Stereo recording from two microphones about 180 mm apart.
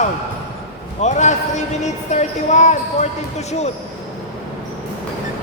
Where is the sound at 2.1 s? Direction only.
40° left (ahead or behind).